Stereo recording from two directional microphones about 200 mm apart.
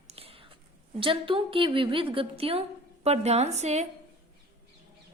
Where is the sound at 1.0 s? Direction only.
25° right (ahead or behind).